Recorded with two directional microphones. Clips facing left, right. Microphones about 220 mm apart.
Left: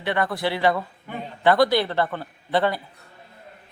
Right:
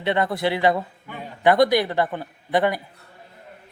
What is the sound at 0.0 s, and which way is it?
Speech, 20° right (ahead or behind).